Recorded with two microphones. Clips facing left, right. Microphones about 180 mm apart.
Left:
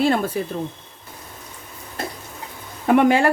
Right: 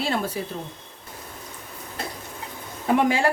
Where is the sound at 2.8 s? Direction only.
60° left (ahead or behind).